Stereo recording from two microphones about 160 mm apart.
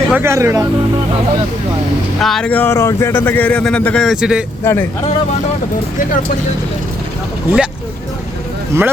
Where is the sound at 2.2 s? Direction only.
5° left (ahead or behind).